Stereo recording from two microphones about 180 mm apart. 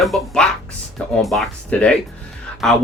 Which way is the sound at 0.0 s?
Centre (ahead or behind).